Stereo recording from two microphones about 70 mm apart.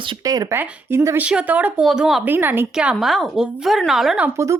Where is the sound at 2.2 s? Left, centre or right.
Right.